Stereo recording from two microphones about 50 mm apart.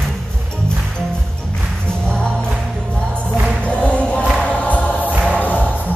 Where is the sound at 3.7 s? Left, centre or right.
Left.